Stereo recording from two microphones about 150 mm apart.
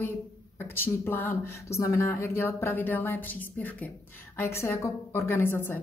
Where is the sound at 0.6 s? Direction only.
15° left (ahead or behind).